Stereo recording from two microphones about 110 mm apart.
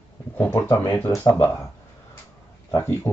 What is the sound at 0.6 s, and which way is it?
Speech, 30° left (ahead or behind).